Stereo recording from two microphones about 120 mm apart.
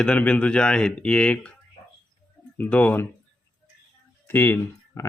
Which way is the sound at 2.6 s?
15° left (ahead or behind).